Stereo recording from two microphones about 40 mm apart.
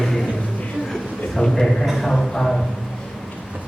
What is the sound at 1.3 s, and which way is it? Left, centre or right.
Speech, centre.